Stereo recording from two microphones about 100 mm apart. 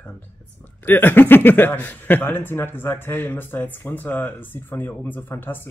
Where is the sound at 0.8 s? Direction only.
20° left (ahead or behind).